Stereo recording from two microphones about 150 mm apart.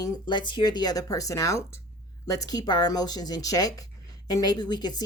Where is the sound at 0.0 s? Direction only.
30° left (ahead or behind).